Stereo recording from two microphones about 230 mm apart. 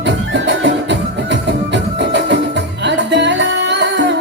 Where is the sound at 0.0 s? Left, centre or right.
Right.